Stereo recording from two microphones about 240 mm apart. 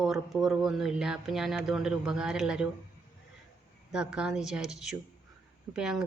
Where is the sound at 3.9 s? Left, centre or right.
Centre.